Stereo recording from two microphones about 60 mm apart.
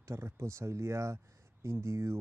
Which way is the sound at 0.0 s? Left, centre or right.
Right.